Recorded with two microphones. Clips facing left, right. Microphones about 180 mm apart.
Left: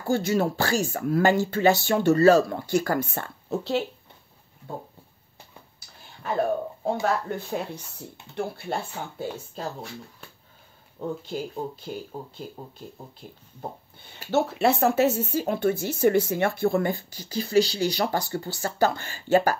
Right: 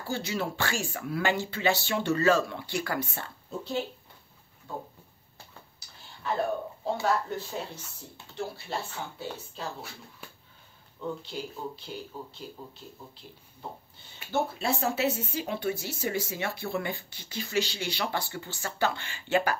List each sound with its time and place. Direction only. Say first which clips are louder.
0.0 s speech: left 8 dB; 50° left (ahead or behind)
3.4 s speech: left 6 dB; 80° left
6.8 s speech: even; 50° left (ahead or behind)
11.0 s speech: left 5 dB; 45° left (ahead or behind)
13.2 s speech: left 5 dB; 50° left (ahead or behind)
14.3 s speech: left 7 dB; 75° left (ahead or behind); by 19.6 s 40° left (ahead or behind)